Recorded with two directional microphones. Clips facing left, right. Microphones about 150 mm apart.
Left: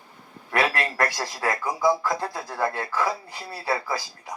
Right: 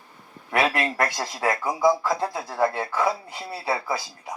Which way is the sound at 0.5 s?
20° right (ahead or behind).